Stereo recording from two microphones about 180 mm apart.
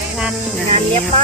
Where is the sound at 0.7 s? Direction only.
35° right (ahead or behind).